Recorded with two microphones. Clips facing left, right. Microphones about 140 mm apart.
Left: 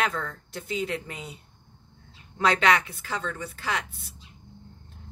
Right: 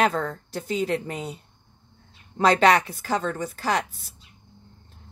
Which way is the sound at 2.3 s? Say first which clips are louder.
Right 4 dB; 35° right (ahead or behind).